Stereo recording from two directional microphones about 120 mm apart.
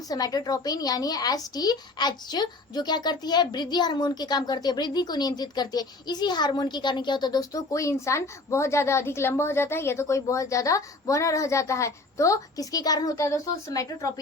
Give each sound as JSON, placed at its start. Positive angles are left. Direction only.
{"t": 0.1, "sound": "speech", "side_deg": 30}